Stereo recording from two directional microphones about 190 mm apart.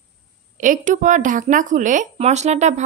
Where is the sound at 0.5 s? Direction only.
45° right (ahead or behind).